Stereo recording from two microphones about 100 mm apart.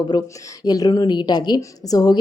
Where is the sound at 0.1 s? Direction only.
40° left (ahead or behind).